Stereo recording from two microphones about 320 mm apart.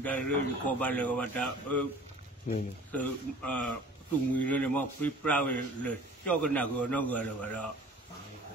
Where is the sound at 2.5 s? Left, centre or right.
Left.